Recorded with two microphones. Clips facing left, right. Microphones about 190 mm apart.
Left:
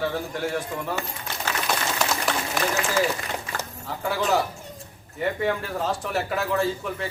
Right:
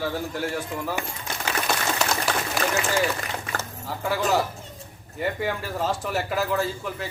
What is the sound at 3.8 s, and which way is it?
Speech, centre (ahead or behind).